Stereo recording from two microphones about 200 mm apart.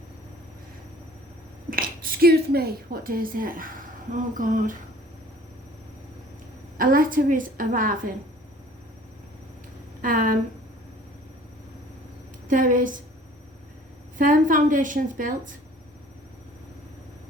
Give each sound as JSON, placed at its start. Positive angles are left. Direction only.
{"t": 1.7, "sound": "a woman's voice", "side_deg": -45}
{"t": 6.7, "sound": "a woman's voice", "side_deg": -45}
{"t": 10.0, "sound": "a woman's voice", "side_deg": -45}
{"t": 12.5, "sound": "a woman's voice", "side_deg": -40}
{"t": 14.2, "sound": "a woman's voice", "side_deg": -40}